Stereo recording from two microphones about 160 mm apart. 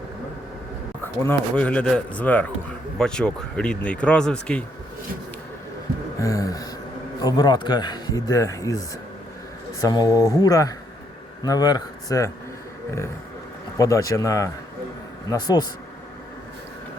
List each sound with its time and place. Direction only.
1.0 s speech: 15° left (ahead or behind)
6.1 s speech: 20° left (ahead or behind)
9.8 s speech: 25° left (ahead or behind)
13.7 s speech: 20° left (ahead or behind)